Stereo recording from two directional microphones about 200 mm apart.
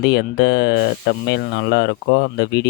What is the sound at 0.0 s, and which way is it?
Speech, 55° left (ahead or behind).